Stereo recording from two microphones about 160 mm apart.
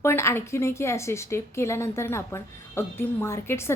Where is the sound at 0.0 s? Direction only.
15° left (ahead or behind).